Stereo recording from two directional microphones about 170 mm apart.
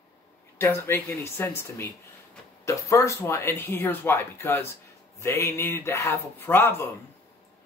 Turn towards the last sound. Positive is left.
turn(degrees=15)  # may be behind; listen again after turning